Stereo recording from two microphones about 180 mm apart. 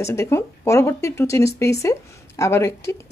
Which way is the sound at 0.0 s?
15° left (ahead or behind).